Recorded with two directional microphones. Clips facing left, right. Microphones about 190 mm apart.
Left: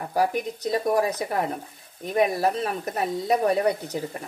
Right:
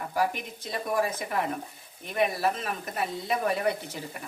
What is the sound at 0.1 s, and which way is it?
Speech, 40° left (ahead or behind).